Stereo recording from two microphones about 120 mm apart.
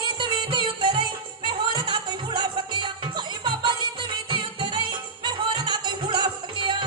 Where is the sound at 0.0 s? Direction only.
40° right (ahead or behind).